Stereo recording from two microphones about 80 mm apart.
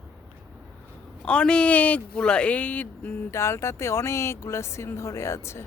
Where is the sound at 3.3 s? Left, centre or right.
Left.